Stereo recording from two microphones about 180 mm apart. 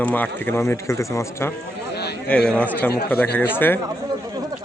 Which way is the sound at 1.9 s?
65° left (ahead or behind).